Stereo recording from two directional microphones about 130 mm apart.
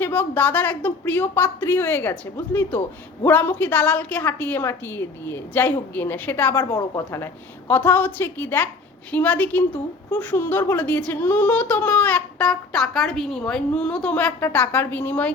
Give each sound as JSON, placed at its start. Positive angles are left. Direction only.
{"t": 0.0, "sound": "a woman's voice", "side_deg": 15}
{"t": 6.7, "sound": "a woman's voice", "side_deg": 25}